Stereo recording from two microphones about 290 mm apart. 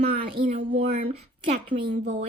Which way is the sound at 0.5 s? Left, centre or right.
Right.